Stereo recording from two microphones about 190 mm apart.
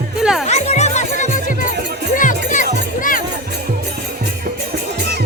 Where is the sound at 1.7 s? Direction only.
60° right (ahead or behind).